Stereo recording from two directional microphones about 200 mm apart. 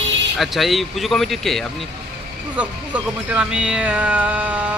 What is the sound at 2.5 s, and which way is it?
Speech, 5° right (ahead or behind).